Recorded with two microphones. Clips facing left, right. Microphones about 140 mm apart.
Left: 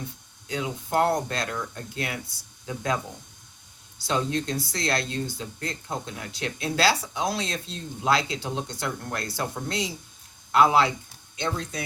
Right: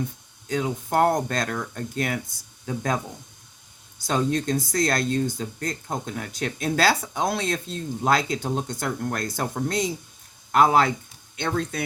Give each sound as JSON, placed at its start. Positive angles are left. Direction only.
{"t": 0.4, "sound": "speech", "side_deg": -45}
{"t": 11.3, "sound": "speech", "side_deg": -60}